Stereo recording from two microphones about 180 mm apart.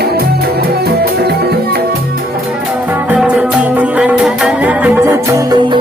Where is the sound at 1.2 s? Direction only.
60° right (ahead or behind).